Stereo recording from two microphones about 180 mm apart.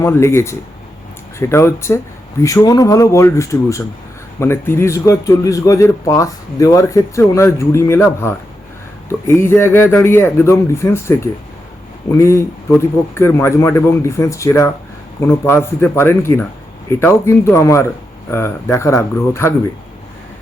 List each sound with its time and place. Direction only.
0.0 s speech: 15° left (ahead or behind)